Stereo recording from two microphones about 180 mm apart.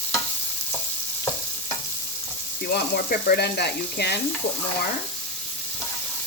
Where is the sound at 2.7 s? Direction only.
60° left (ahead or behind).